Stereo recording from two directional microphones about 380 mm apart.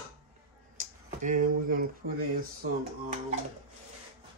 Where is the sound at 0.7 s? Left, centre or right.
Right.